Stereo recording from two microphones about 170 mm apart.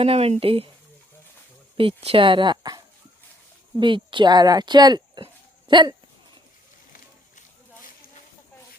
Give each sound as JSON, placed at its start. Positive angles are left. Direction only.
{"t": 0.0, "sound": "speech", "side_deg": -35}
{"t": 1.7, "sound": "speech", "side_deg": -35}